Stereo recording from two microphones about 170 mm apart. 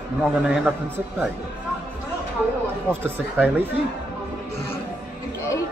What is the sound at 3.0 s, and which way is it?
Speech, 10° right (ahead or behind).